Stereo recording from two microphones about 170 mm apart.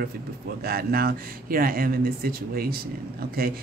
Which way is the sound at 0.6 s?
60° right (ahead or behind).